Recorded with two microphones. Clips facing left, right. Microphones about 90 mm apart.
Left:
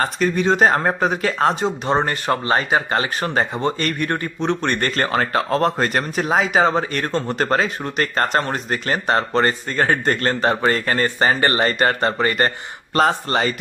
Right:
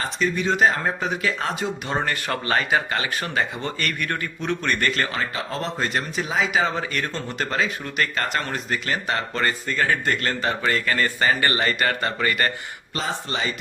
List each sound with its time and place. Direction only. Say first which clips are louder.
0.0 s speech: left 5 dB; 45° left (ahead or behind)
13.0 s speech: left 10 dB; 60° left (ahead or behind)